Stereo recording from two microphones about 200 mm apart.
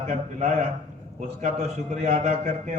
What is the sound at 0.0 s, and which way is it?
A man's voice, 35° right (ahead or behind).